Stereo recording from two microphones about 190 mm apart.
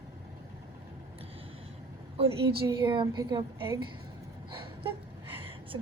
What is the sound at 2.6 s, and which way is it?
Speech, 20° right (ahead or behind).